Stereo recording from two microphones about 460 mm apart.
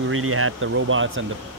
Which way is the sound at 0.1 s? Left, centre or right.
Right.